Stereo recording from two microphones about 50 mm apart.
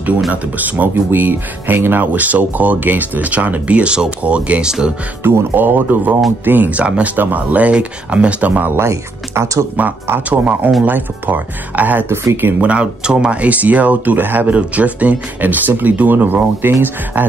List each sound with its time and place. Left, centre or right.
0.3 s speech: right; by 4.9 s centre
5.5 s speech: right
8.7 s speech: right
10.3 s speech: right
12.4 s speech: right
12.6 s speech: centre
13.4 s speech: right